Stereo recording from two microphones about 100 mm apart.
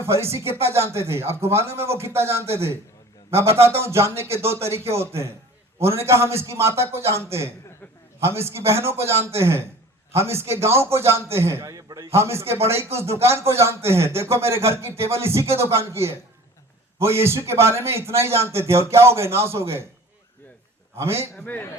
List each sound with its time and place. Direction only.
0.0 s speech: 25° right (ahead or behind)
20.9 s speech: 25° right (ahead or behind)
21.3 s a man's voice: 15° left (ahead or behind)